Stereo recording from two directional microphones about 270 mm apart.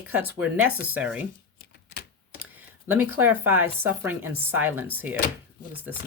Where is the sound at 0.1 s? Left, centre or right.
Centre.